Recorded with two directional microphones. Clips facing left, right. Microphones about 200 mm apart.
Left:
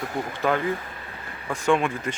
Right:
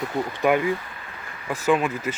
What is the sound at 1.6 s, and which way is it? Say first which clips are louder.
Speech: right 1 dB; 5° right (ahead or behind).